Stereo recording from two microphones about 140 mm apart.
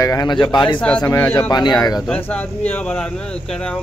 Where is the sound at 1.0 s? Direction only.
20° left (ahead or behind).